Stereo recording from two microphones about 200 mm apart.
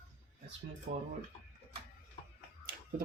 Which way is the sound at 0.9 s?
45° right (ahead or behind).